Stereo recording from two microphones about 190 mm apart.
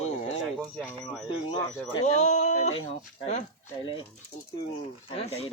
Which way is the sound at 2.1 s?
40° left (ahead or behind).